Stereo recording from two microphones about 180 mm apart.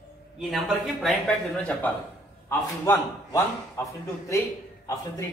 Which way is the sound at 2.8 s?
15° left (ahead or behind).